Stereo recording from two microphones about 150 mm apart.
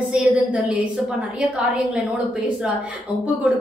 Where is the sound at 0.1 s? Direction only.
10° right (ahead or behind).